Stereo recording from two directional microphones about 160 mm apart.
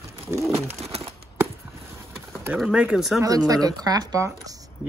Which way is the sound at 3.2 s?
20° right (ahead or behind).